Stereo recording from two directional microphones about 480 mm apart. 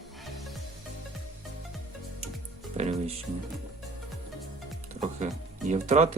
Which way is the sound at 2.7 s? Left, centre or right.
Centre.